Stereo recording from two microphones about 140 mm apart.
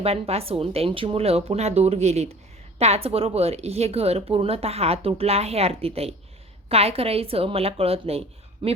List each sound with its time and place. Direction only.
0.0 s speech: 45° right (ahead or behind)